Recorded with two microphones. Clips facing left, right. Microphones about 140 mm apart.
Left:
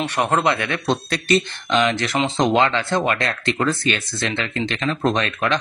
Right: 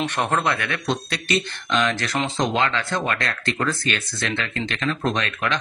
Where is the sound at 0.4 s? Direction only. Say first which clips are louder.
Left 4 dB; 25° left (ahead or behind).